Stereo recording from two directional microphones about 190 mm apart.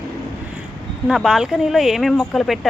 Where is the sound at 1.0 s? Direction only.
Centre (ahead or behind).